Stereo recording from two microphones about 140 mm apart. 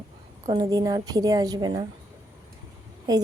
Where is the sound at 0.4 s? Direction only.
30° right (ahead or behind).